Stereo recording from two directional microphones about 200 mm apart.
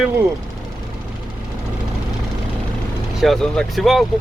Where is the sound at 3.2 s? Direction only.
Centre (ahead or behind).